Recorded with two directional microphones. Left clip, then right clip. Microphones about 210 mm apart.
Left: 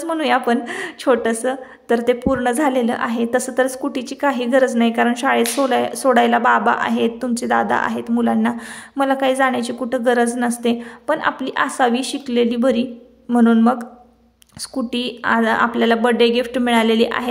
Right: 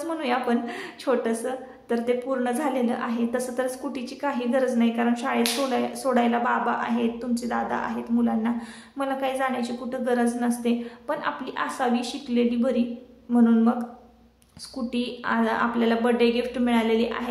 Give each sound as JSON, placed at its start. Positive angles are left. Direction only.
{"t": 0.0, "sound": "a woman's voice", "side_deg": 40}
{"t": 14.9, "sound": "a woman's voice", "side_deg": 40}